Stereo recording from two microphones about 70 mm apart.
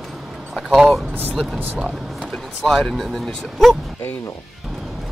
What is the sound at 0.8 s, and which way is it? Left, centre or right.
Speech, centre.